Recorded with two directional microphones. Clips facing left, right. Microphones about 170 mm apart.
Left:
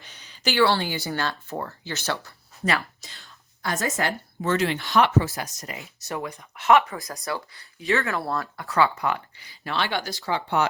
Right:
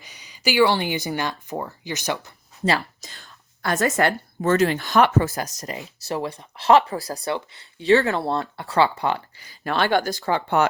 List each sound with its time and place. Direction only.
0.0 s speech: 10° right (ahead or behind)
3.0 s speech: 45° right (ahead or behind); by 7.9 s 25° right (ahead or behind)
7.9 s speech: 35° right (ahead or behind)
9.4 s speech: 45° right (ahead or behind)